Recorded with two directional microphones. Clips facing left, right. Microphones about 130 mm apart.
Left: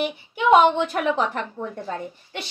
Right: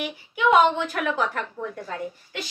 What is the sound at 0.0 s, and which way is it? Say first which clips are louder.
A woman's voice: left 1 dB; 25° left (ahead or behind).